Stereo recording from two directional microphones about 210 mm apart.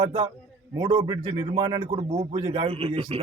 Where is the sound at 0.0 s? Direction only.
25° right (ahead or behind).